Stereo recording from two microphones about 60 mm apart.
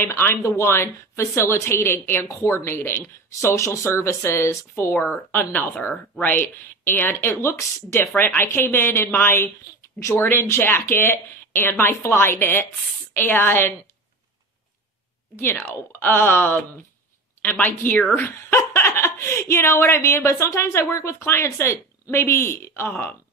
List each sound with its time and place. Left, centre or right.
0.0 s speech: left
0.4 s a woman's voice: left
2.2 s a woman's voice: left
3.5 s a woman's voice: left
4.9 s speech: left
15.5 s speech: left
18.5 s a woman's voice: left